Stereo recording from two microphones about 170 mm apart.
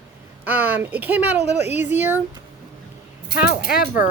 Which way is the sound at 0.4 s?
10° right (ahead or behind).